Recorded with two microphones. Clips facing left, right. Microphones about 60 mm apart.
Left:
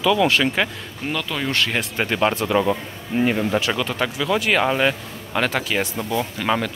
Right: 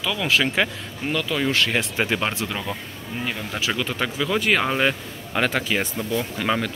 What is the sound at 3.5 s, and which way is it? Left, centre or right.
Speech, centre.